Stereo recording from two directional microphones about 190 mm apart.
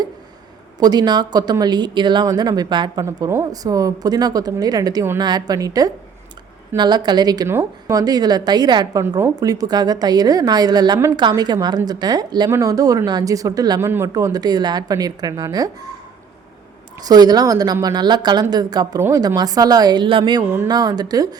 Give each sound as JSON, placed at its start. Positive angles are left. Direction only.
{"t": 0.8, "sound": "a woman's voice", "side_deg": -20}
{"t": 17.0, "sound": "a woman's voice", "side_deg": -20}